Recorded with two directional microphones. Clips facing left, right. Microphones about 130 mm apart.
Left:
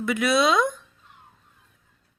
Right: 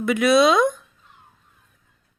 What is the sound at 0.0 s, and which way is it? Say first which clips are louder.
Speech: right 5 dB; 20° right (ahead or behind).